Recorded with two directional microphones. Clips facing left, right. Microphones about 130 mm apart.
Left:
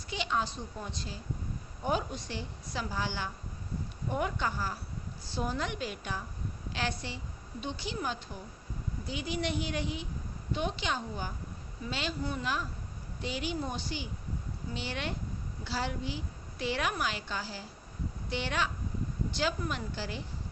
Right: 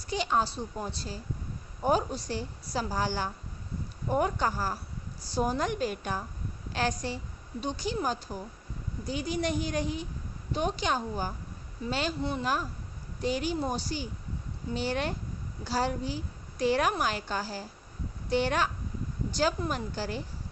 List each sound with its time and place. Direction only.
0.0 s a woman's voice: 40° right (ahead or behind)